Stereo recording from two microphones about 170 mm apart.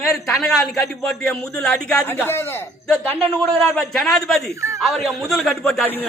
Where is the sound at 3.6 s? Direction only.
5° left (ahead or behind).